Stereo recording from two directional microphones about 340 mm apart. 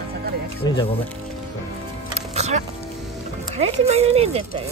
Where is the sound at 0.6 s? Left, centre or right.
Centre.